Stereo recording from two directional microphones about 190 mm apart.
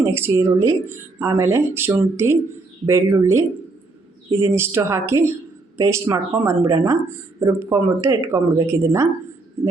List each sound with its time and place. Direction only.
0.0 s speech: 10° right (ahead or behind)